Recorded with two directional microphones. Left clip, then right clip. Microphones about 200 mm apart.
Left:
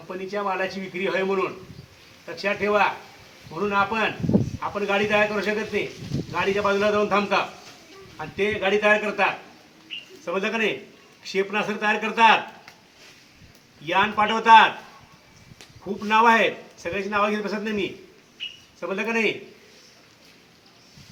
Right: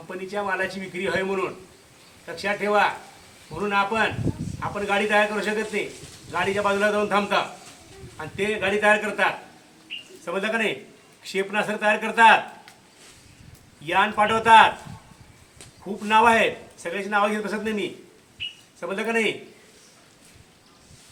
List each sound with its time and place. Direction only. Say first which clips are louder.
0.1 s a man's voice: even; 5° right (ahead or behind)
9.9 s a sound: even; 25° left (ahead or behind)
10.2 s a man's voice: even; centre (ahead or behind)
13.8 s a man's voice: even; centre (ahead or behind)
16.0 s a man's voice: even; 5° right (ahead or behind)